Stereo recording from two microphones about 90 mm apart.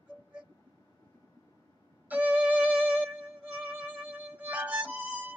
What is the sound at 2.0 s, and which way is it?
Music, 15° right (ahead or behind).